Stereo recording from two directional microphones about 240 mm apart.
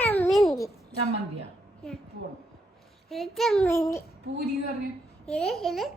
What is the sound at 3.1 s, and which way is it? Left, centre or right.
Speech, centre.